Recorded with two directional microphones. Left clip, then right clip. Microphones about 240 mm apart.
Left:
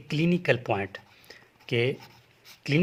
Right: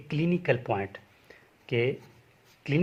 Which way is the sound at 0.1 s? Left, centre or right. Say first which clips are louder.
Left 2 dB; left.